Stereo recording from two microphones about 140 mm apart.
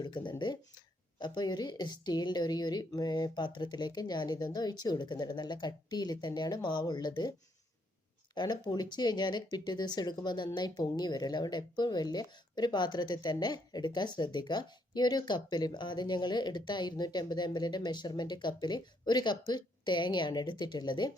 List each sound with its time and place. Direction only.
0.0 s speech: 35° left (ahead or behind)
8.4 s speech: 30° left (ahead or behind)